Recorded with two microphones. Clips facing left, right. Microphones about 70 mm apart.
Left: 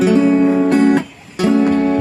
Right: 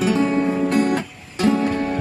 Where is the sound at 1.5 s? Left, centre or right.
Left.